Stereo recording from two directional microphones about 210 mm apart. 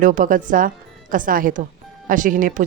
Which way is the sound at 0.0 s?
40° right (ahead or behind).